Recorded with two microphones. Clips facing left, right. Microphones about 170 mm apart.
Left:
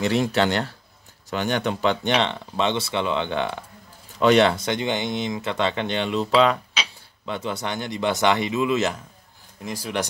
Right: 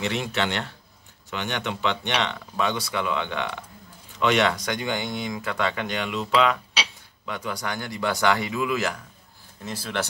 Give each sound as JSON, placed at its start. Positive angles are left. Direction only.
{"t": 0.0, "sound": "speech", "side_deg": 40}